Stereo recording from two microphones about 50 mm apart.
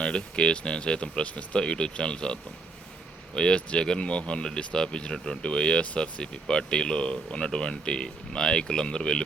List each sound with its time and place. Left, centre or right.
0.0 s speech: centre